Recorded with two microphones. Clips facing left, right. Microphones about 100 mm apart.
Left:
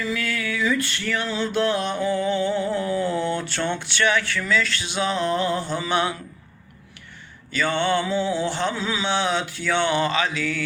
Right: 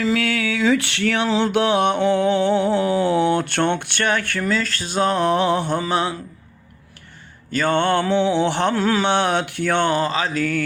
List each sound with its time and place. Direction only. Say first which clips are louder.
0.0 s mantra: right 6 dB; 70° right (ahead or behind)
5.8 s a man's voice: right 2 dB; 30° right (ahead or behind)
7.5 s mantra: right 4 dB; 50° right (ahead or behind)